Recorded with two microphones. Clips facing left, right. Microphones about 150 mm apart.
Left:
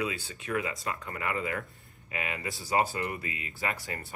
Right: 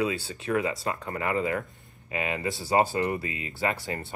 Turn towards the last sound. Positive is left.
turn(degrees=-25)  # may be behind; listen again after turning